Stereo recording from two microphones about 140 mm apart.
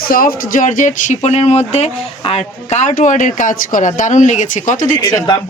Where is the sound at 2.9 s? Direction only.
65° left (ahead or behind).